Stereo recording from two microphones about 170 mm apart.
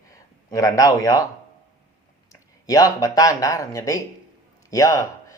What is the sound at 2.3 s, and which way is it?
Speech, 20° left (ahead or behind).